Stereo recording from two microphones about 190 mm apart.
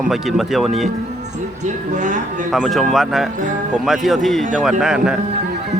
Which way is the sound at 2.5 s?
Centre (ahead or behind).